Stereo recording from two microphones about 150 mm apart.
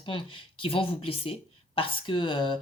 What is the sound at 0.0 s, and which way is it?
Speech, 35° left (ahead or behind).